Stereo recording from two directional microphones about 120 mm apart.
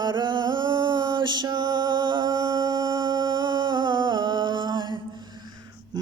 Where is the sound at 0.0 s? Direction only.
35° right (ahead or behind).